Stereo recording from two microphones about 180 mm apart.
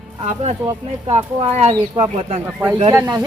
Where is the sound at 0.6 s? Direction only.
25° right (ahead or behind).